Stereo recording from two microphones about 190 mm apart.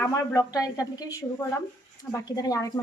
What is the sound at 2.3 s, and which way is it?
Speech, 20° left (ahead or behind).